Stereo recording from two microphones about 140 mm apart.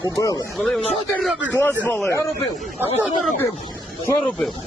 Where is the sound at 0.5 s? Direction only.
Centre (ahead or behind).